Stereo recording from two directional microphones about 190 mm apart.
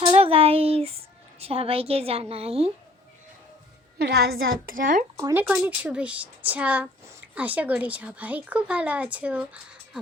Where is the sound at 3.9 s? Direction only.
55° right (ahead or behind).